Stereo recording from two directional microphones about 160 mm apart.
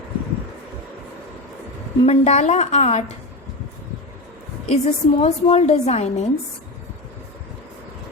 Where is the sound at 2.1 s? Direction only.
45° left (ahead or behind).